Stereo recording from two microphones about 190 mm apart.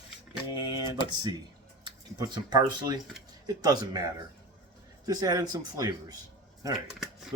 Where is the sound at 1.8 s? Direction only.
25° right (ahead or behind).